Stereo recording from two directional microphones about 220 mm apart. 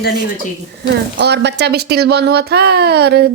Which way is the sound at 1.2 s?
50° right (ahead or behind).